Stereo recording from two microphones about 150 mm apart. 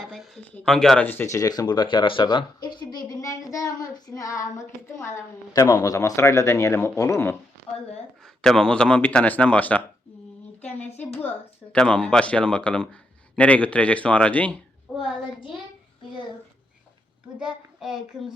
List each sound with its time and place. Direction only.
0.0 s speech: centre (ahead or behind); by 7.3 s 20° left (ahead or behind)
8.2 s speech: 5° left (ahead or behind)
11.7 s speech: 5° left (ahead or behind)
17.4 s speech: 5° right (ahead or behind)